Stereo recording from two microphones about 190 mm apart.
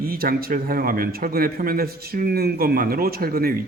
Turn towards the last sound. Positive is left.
turn(degrees=-50)  # may be behind; listen again after turning